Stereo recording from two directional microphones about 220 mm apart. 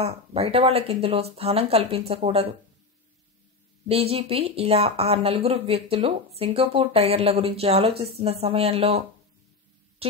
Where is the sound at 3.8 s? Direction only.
25° right (ahead or behind).